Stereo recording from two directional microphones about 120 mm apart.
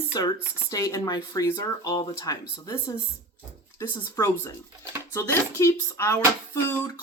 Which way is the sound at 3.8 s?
25° left (ahead or behind).